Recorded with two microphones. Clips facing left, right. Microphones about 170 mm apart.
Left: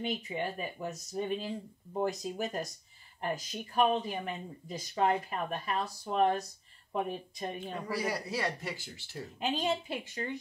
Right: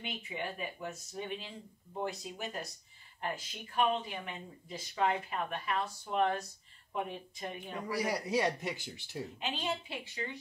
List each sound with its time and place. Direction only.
0.0 s speech: 40° left (ahead or behind)
7.9 s speech: 20° right (ahead or behind)
9.4 s a woman's voice: 45° left (ahead or behind)